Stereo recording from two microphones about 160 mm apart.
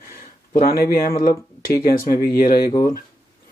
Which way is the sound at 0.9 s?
65° left (ahead or behind).